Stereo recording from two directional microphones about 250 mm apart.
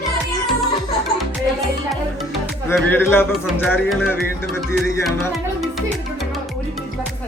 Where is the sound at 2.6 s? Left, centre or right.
Centre.